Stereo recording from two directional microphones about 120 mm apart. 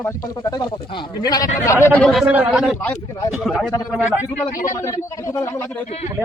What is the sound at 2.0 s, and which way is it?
A man's voice, centre (ahead or behind).